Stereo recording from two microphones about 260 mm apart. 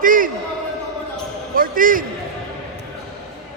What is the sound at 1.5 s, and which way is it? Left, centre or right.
Speech, right.